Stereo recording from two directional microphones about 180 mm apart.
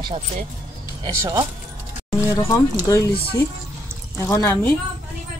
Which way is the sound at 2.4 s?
15° left (ahead or behind).